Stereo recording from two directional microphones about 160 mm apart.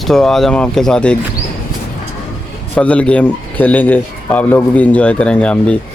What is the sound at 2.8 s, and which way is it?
A man's voice, 5° left (ahead or behind).